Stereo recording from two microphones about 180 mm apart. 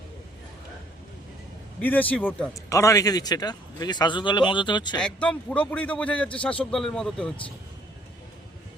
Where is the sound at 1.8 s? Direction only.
10° left (ahead or behind); by 4.9 s 25° left (ahead or behind).